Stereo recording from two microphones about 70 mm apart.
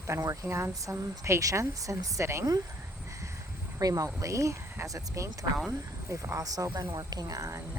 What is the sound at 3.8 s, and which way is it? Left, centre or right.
A woman's voice, right.